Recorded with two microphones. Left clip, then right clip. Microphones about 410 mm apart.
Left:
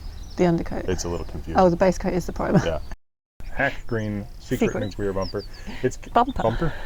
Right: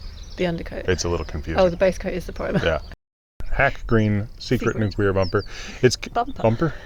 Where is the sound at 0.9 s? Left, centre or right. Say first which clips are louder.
Right 5 dB; right.